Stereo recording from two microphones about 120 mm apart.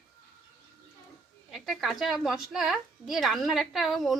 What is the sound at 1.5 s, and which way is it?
A woman's voice, centre (ahead or behind).